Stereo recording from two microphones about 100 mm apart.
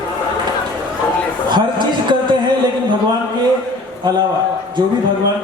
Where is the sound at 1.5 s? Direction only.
50° right (ahead or behind).